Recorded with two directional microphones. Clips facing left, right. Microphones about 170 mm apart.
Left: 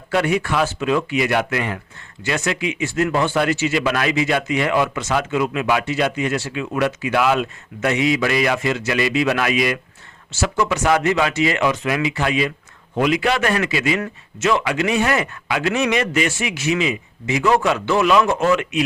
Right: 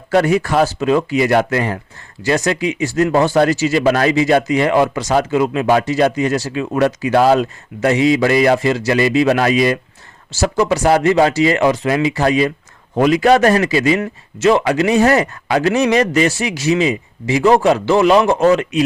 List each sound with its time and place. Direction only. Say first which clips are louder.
0.1 s speech: right 5 dB; 40° right (ahead or behind)